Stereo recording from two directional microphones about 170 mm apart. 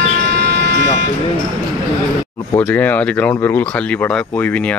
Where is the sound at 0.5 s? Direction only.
90° right.